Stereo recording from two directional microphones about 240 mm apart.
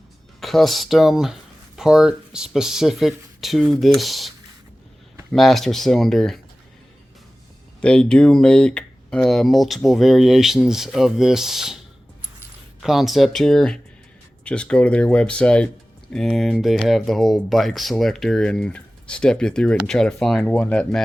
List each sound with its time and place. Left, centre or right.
0.3 s speech: centre
5.3 s speech: centre
7.8 s speech: centre
12.8 s speech: centre